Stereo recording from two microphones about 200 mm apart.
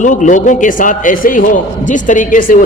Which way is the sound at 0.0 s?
40° left (ahead or behind).